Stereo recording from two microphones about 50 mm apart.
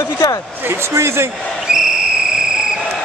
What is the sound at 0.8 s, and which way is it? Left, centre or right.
Speech, right.